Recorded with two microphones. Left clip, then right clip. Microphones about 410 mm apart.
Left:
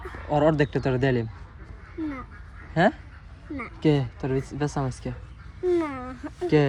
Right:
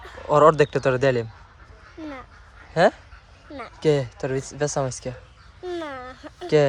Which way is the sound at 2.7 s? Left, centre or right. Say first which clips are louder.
Right 4 dB; centre.